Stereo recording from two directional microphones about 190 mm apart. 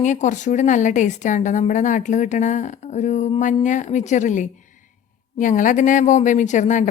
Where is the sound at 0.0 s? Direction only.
40° left (ahead or behind).